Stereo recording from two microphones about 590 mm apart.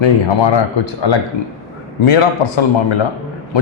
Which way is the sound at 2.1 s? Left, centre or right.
Left.